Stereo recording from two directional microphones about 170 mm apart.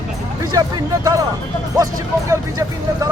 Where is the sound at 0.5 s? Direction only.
20° right (ahead or behind).